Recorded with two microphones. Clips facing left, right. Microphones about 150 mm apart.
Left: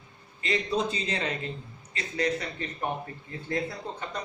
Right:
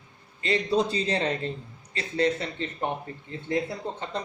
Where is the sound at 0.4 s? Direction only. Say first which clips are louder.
Right 3 dB; 35° right (ahead or behind).